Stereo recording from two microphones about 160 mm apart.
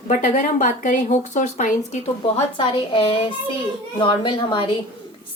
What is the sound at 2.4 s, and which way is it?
A woman's voice, 35° left (ahead or behind).